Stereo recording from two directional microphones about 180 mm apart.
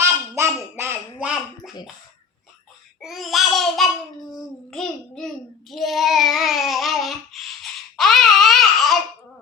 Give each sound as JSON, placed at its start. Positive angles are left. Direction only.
{"t": 0.0, "sound": "a sound", "side_deg": -15}
{"t": 3.0, "sound": "babbling", "side_deg": 0}
{"t": 4.7, "sound": "child singing", "side_deg": 5}